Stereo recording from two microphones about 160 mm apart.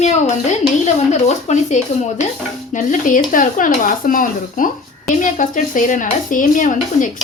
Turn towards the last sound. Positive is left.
turn(degrees=55)  # may be behind; listen again after turning